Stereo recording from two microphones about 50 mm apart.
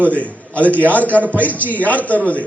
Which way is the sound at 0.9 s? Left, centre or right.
Left.